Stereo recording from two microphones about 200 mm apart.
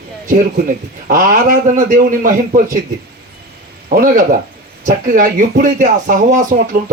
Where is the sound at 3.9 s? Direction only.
45° right (ahead or behind).